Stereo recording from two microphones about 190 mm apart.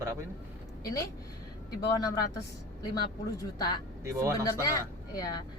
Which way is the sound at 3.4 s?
20° left (ahead or behind).